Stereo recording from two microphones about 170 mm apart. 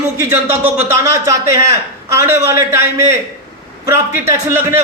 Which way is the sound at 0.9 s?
15° right (ahead or behind).